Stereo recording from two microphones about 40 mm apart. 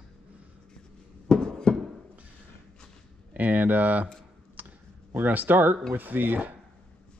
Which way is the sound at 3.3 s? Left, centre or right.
Right.